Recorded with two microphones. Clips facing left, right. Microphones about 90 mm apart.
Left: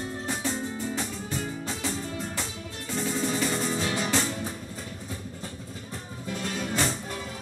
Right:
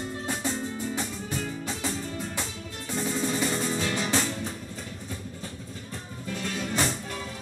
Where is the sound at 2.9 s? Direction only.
Centre (ahead or behind).